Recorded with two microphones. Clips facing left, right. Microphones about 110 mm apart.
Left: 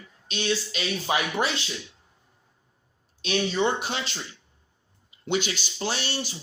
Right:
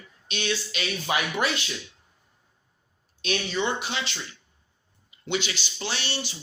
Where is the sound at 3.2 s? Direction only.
35° left (ahead or behind).